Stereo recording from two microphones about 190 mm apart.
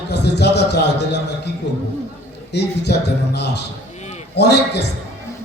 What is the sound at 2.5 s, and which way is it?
A man's voice, 60° left (ahead or behind).